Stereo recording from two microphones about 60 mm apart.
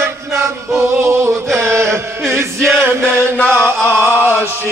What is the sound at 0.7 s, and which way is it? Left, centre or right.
Chant, right.